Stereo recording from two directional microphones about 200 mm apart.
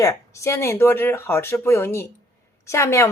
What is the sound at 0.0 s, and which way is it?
A woman's voice, 15° left (ahead or behind).